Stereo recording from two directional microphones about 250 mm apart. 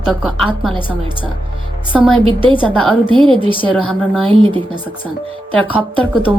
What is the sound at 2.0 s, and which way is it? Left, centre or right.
A woman's voice, right.